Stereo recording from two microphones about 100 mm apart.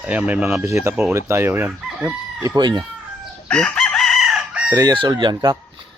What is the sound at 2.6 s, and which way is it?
Speech, 50° right (ahead or behind).